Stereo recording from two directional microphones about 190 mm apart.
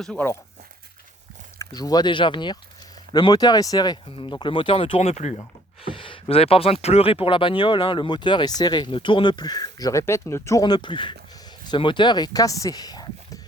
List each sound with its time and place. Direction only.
0.0 s speech: 10° left (ahead or behind)
1.5 s speech: 20° left (ahead or behind)